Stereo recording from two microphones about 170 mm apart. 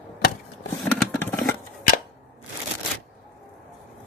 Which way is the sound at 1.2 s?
5° left (ahead or behind).